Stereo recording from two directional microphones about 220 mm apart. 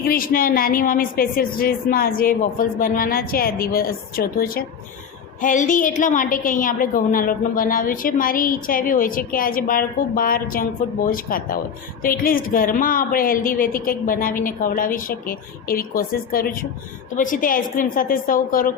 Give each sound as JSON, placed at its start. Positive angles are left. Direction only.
{"t": 0.0, "sound": "a woman's voice", "side_deg": 40}